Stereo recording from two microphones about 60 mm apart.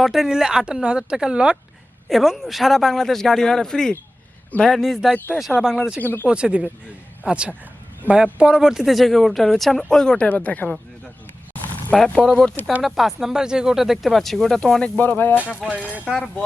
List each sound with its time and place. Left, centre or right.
0.0 s speech: centre
2.0 s speech: centre
5.1 s speech: left
6.2 s speech: centre
10.2 s speech: left
11.9 s speech: centre
12.8 s speech: centre
14.9 s speech: left
15.6 s speech: centre
16.0 s speech: centre